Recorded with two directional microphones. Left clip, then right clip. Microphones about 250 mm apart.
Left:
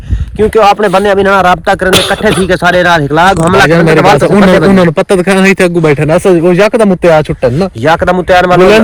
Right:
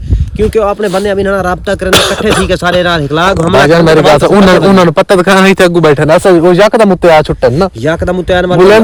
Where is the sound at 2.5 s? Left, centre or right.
Centre.